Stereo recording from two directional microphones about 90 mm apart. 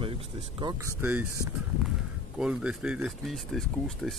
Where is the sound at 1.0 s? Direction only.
20° right (ahead or behind).